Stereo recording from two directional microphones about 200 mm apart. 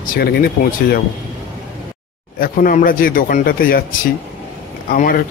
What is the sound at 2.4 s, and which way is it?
Speech, 45° left (ahead or behind).